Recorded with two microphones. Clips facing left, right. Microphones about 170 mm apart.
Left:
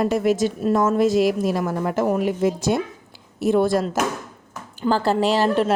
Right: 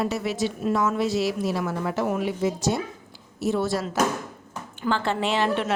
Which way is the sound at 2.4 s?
55° left (ahead or behind).